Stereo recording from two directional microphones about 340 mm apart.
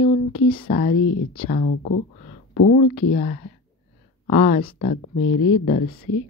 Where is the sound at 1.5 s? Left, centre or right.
Left.